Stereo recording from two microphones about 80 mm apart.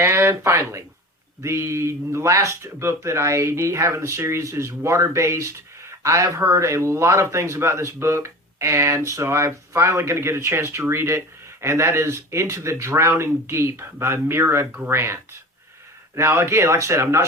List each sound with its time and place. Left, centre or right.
0.0 s speech: right
14.7 s speech: right
14.9 s speech: right